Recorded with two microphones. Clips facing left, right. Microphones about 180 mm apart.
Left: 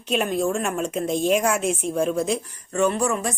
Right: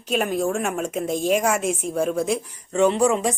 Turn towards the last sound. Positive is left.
turn(degrees=-15)  # may be behind; listen again after turning